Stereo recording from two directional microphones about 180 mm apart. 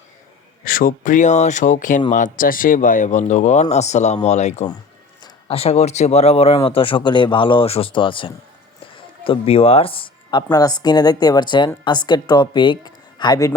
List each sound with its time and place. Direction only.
0.6 s speech: 50° left (ahead or behind); by 13.5 s 20° left (ahead or behind)